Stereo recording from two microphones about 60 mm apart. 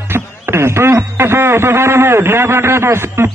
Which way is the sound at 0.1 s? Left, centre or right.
Right.